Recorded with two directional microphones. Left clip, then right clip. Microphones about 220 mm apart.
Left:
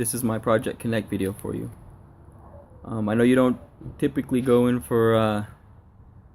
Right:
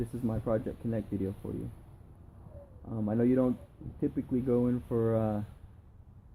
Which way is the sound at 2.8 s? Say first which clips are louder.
Left 9 dB; 25° left (ahead or behind).